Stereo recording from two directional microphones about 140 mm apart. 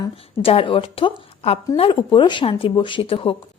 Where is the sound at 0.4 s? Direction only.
40° left (ahead or behind).